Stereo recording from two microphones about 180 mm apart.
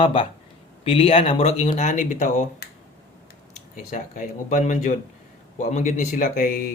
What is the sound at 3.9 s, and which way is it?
Speech, 45° left (ahead or behind).